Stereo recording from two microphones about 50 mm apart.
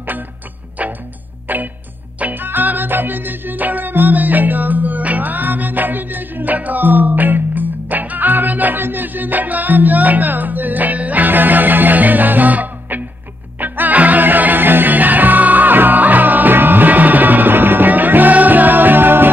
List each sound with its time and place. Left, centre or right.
0.8 s music: right